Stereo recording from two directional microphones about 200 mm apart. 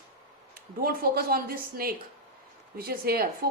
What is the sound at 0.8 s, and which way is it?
A woman's voice, 50° right (ahead or behind).